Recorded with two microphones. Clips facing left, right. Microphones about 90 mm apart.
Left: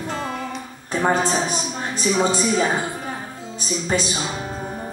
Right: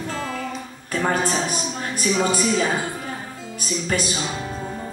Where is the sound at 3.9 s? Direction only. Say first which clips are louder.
Left 2 dB; 25° left (ahead or behind).